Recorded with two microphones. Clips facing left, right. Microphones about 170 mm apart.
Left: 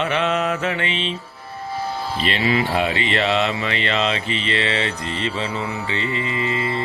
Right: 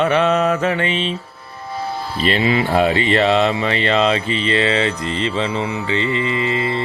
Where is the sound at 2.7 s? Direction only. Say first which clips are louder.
Right 6 dB; 40° right (ahead or behind).